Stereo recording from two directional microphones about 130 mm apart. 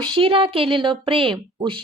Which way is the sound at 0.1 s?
45° right (ahead or behind).